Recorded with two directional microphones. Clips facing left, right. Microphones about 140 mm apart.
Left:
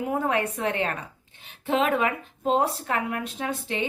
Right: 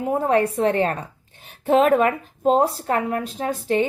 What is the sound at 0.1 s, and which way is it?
A woman's voice, 35° right (ahead or behind).